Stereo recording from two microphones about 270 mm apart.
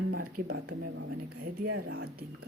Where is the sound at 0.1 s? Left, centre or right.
Right.